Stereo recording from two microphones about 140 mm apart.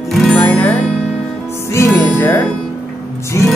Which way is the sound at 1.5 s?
20° left (ahead or behind).